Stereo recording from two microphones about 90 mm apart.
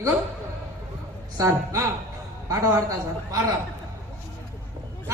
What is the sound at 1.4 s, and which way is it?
Speech, 35° right (ahead or behind).